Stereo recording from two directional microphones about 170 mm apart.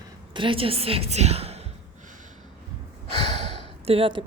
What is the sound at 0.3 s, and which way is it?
A woman's voice, 30° right (ahead or behind).